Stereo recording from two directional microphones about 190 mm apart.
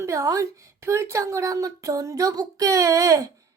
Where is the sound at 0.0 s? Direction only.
15° right (ahead or behind).